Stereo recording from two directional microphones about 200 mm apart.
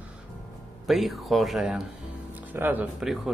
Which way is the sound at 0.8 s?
Centre (ahead or behind).